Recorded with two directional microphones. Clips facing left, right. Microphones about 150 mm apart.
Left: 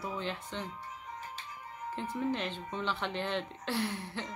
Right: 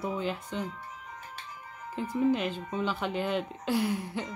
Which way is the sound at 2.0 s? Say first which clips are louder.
Right 7 dB; 10° right (ahead or behind).